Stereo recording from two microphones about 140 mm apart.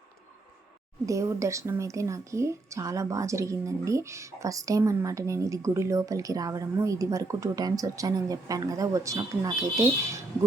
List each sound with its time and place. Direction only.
1.0 s speech: 20° right (ahead or behind)